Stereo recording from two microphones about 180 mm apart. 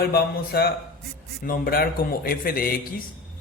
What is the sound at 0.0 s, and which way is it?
A man's voice, 60° left (ahead or behind).